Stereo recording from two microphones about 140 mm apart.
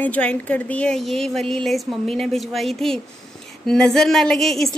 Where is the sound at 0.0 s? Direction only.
10° left (ahead or behind).